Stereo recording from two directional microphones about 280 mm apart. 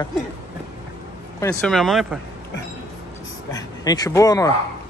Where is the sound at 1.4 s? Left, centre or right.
Centre.